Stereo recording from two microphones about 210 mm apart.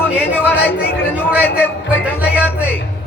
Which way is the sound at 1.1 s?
5° right (ahead or behind).